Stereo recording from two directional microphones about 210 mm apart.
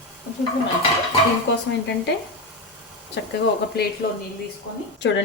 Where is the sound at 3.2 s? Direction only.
55° left (ahead or behind).